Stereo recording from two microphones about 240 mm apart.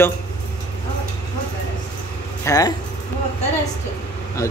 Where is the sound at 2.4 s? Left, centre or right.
Centre.